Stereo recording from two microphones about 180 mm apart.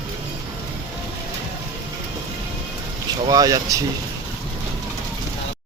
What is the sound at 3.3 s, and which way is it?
Speech, 20° right (ahead or behind).